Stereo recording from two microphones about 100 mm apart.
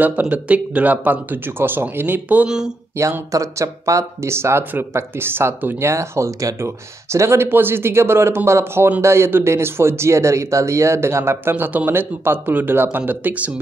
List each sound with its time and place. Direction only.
0.0 s speech: 15° right (ahead or behind)
3.0 s speech: 30° right (ahead or behind); by 13.5 s 15° right (ahead or behind)